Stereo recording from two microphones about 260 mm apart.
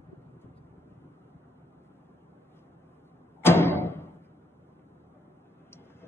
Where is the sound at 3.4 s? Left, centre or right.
Centre.